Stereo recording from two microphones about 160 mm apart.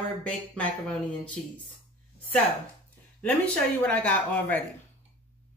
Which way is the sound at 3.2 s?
10° left (ahead or behind).